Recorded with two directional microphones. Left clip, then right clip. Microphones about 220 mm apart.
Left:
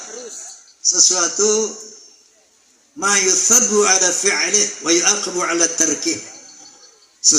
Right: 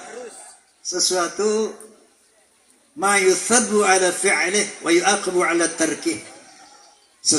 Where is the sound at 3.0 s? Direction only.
30° left (ahead or behind).